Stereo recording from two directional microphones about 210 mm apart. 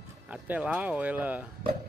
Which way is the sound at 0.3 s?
5° right (ahead or behind).